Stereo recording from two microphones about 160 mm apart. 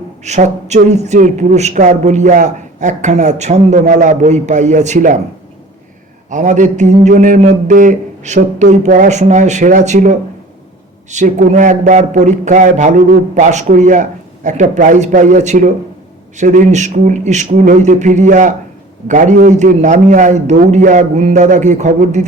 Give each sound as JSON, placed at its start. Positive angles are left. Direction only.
{"t": 0.3, "sound": "a woman's voice", "side_deg": -45}
{"t": 6.3, "sound": "a woman's voice", "side_deg": -50}